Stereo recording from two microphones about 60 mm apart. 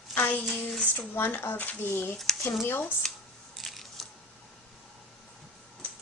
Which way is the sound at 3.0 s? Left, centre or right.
Centre.